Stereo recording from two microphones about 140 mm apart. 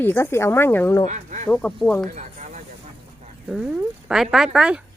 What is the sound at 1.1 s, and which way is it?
Speech, 60° right (ahead or behind).